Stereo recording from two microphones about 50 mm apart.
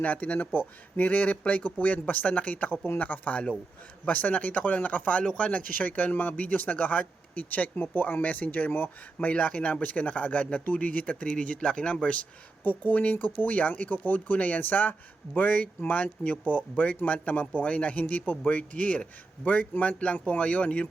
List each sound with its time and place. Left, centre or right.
0.0 s speech: left
5.2 s speech: centre
5.5 s speech: left
9.3 s speech: left
12.6 s speech: left